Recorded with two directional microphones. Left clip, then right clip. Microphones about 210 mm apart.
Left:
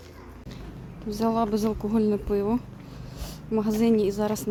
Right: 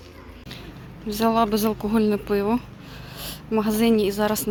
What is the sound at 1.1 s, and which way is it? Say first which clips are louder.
A woman's voice: right 5 dB; centre (ahead or behind).